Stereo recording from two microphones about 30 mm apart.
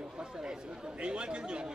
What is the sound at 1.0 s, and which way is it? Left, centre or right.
Speech, right.